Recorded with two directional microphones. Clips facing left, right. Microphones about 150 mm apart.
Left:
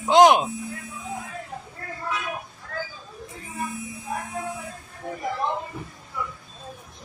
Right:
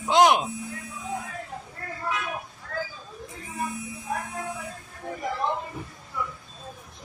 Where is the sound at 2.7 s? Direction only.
Centre (ahead or behind).